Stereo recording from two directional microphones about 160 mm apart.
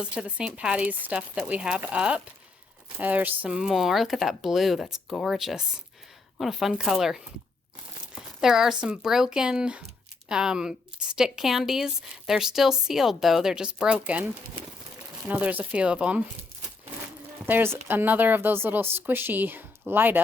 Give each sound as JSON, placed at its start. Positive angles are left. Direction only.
{"t": 0.0, "sound": "a woman's voice", "side_deg": -5}
{"t": 8.4, "sound": "a woman's voice", "side_deg": -5}
{"t": 15.3, "sound": "speech", "side_deg": -10}
{"t": 17.4, "sound": "speech", "side_deg": -15}